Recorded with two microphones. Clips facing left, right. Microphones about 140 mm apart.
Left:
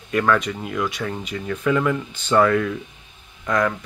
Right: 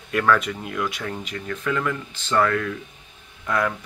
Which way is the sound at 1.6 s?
15° left (ahead or behind).